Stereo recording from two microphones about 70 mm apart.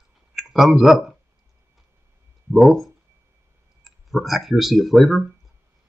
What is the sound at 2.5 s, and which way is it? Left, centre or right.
Speech, centre.